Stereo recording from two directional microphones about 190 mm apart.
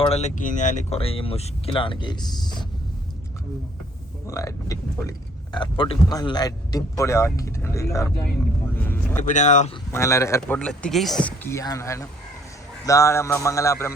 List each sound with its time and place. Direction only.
0.0 s speech: 35° left (ahead or behind)
4.3 s speech: 15° left (ahead or behind)
9.2 s speech: 40° left (ahead or behind)
9.9 s speech: 15° left (ahead or behind)